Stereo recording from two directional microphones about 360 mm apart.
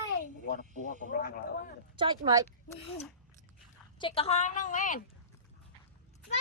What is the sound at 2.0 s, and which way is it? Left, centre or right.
Speech, centre.